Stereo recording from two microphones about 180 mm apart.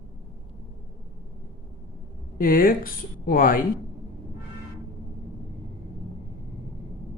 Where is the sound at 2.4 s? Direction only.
50° left (ahead or behind).